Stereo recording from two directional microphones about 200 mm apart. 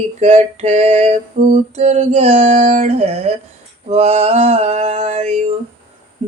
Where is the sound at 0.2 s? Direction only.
30° right (ahead or behind).